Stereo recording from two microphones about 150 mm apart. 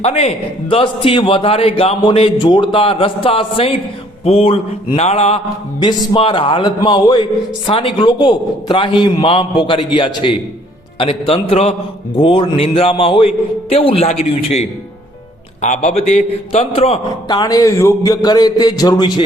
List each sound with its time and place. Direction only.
0.0 s a man's voice: 45° left (ahead or behind)
5.8 s a man's voice: 35° left (ahead or behind)
17.2 s a man's voice: 25° left (ahead or behind)